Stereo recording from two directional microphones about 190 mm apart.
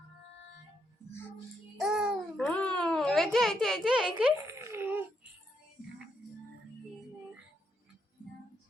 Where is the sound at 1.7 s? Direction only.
Centre (ahead or behind).